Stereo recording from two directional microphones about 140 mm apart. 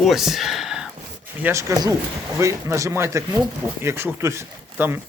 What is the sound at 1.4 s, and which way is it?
Speech, 20° right (ahead or behind).